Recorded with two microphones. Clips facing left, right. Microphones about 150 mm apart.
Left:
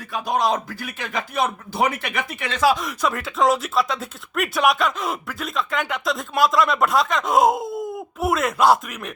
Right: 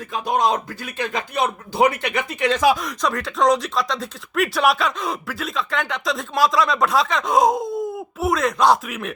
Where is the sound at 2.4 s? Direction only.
15° right (ahead or behind).